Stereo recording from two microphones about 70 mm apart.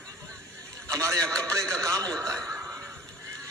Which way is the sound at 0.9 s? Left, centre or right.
Right.